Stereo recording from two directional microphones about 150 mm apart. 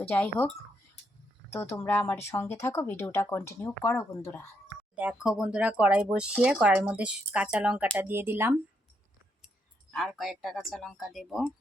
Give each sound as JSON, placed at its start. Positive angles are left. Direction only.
{"t": 0.1, "sound": "speech", "side_deg": 15}
{"t": 1.5, "sound": "speech", "side_deg": 15}
{"t": 5.2, "sound": "speech", "side_deg": -5}
{"t": 9.9, "sound": "speech", "side_deg": 0}